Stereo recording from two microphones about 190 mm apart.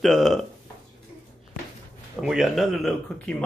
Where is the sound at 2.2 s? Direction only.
Centre (ahead or behind).